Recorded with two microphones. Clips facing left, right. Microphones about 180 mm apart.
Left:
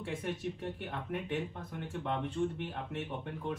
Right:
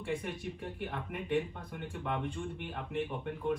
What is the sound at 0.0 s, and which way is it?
Speech, centre (ahead or behind).